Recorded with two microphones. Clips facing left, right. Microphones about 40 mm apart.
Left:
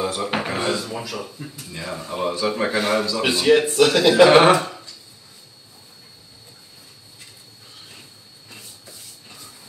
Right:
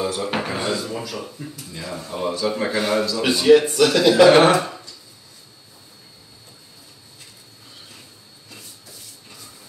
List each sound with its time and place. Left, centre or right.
0.0 s drawer open or close: centre
0.7 s a man's voice: centre
1.6 s a man's voice: centre